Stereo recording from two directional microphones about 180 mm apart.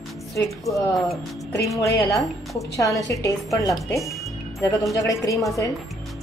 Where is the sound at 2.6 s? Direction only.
20° left (ahead or behind).